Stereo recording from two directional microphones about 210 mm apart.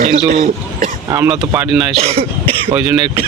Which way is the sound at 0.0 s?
40° right (ahead or behind).